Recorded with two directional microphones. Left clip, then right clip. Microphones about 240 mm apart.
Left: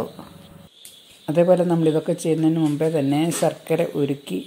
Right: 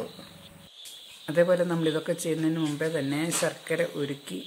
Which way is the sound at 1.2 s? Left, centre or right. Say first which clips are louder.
Left 6 dB; centre.